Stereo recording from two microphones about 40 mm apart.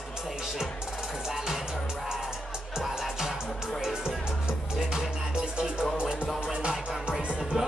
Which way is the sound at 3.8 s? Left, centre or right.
Centre.